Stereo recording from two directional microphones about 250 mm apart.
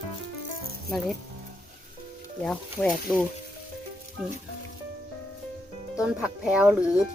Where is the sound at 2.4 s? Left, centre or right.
Centre.